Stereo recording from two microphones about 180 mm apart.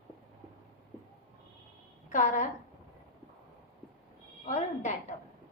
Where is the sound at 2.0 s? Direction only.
45° left (ahead or behind).